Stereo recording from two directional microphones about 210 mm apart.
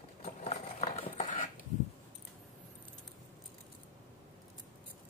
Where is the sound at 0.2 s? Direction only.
35° left (ahead or behind).